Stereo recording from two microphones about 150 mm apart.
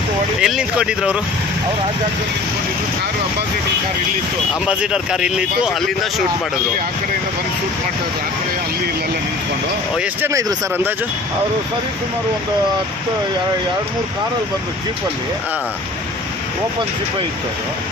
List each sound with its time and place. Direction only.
0.4 s speech: 5° right (ahead or behind)
4.6 s speech: 5° right (ahead or behind)
10.0 s speech: 15° right (ahead or behind)